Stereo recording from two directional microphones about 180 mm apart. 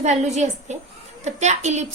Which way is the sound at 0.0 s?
40° right (ahead or behind).